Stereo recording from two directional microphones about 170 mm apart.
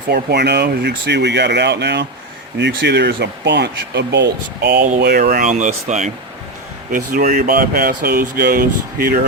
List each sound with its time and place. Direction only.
0.1 s speech: 75° right (ahead or behind)
5.5 s speech: 45° right (ahead or behind)